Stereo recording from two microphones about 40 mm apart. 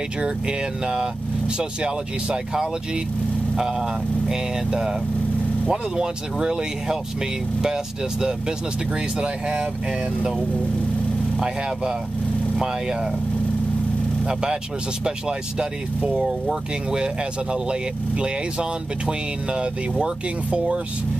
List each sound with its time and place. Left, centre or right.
0.2 s speech: centre
11.3 s speech: centre
14.2 s speech: centre
17.0 s speech: right